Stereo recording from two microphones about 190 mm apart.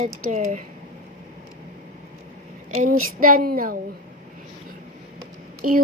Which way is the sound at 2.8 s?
90° right.